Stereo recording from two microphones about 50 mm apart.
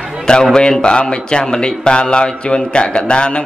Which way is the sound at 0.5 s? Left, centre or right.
Centre.